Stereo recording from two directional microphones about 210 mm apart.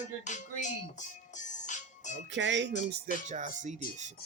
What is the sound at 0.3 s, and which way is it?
Music, 35° left (ahead or behind).